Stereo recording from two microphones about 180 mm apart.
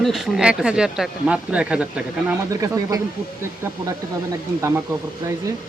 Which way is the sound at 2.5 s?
20° right (ahead or behind).